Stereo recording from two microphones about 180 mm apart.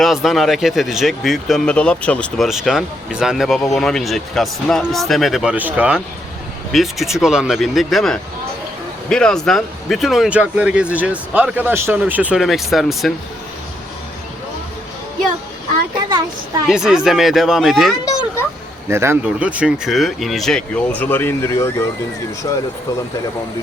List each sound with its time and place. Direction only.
0.0 s speech: centre (ahead or behind)
16.6 s speech: 5° right (ahead or behind)
18.9 s speech: 15° right (ahead or behind); by 22.6 s 20° left (ahead or behind)